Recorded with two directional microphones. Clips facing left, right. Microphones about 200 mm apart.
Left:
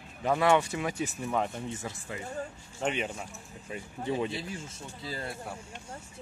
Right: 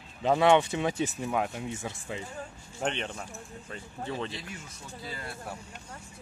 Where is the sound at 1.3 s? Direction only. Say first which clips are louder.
Even; 5° right (ahead or behind).